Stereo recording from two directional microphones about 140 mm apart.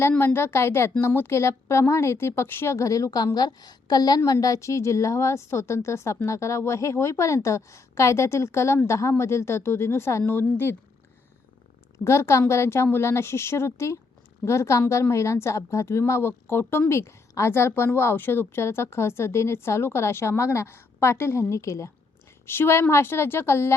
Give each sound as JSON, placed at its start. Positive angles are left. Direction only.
{"t": 0.0, "sound": "a woman's voice", "side_deg": 15}
{"t": 12.0, "sound": "a woman's voice", "side_deg": 20}